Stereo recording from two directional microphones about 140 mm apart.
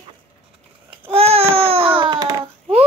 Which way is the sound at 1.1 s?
45° right (ahead or behind).